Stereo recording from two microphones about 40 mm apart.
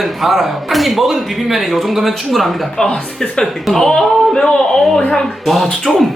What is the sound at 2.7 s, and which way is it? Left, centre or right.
Speech, centre.